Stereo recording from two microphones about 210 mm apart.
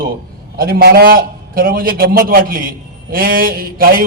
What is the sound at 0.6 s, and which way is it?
A man's voice, 45° right (ahead or behind).